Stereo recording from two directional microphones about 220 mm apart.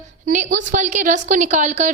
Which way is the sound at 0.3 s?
35° right (ahead or behind).